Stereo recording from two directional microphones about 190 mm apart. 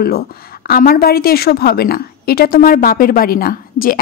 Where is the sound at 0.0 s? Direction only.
50° left (ahead or behind).